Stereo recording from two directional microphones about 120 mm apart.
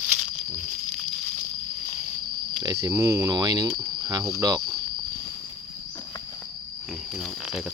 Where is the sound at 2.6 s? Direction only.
25° right (ahead or behind).